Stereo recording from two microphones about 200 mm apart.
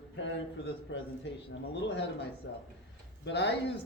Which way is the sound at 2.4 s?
60° left (ahead or behind).